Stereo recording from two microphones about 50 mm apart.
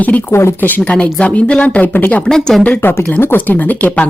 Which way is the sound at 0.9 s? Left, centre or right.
Left.